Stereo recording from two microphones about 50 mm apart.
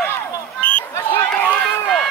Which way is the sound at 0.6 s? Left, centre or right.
Left.